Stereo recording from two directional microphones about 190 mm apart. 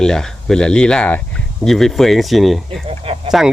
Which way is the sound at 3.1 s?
30° right (ahead or behind).